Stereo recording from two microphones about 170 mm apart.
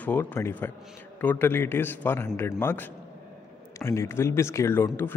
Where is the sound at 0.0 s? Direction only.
10° left (ahead or behind).